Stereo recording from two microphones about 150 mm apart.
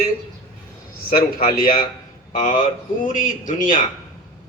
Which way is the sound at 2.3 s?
60° left (ahead or behind).